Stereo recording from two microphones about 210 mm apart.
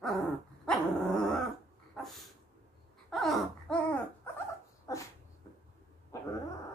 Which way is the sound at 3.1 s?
Centre (ahead or behind).